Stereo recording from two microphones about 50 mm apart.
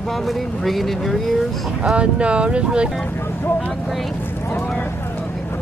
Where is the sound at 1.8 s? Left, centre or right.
Right.